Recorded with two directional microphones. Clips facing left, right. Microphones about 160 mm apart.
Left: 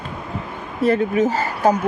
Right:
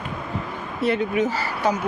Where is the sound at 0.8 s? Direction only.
45° left (ahead or behind).